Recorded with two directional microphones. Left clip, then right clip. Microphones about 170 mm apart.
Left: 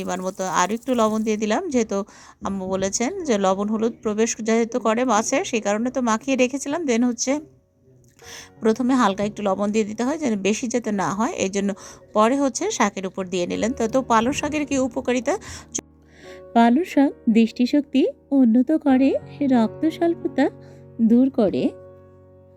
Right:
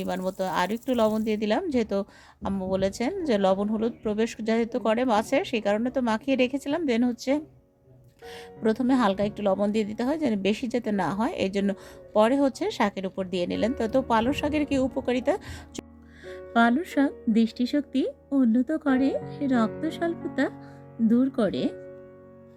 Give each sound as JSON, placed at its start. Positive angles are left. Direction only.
{"t": 0.0, "sound": "speech", "side_deg": 10}